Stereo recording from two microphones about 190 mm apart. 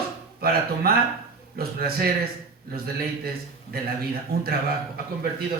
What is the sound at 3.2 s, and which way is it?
A man's voice, 55° right (ahead or behind).